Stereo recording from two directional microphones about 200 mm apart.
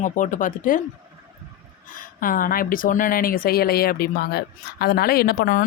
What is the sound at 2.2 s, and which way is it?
Speech, 45° left (ahead or behind).